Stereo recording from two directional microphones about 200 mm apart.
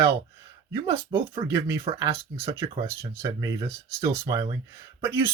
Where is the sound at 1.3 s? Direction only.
25° right (ahead or behind).